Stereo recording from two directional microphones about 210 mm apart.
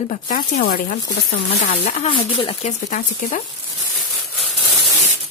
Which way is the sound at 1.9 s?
30° left (ahead or behind).